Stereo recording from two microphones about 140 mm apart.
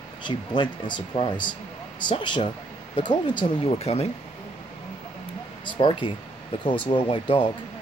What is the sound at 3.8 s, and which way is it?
Speech, 45° left (ahead or behind).